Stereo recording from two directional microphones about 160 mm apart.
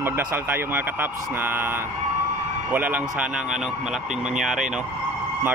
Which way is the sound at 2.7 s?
10° right (ahead or behind).